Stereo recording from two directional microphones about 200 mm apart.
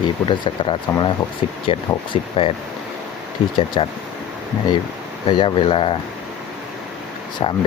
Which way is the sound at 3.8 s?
25° left (ahead or behind).